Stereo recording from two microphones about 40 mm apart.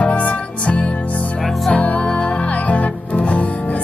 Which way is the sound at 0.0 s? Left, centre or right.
Left.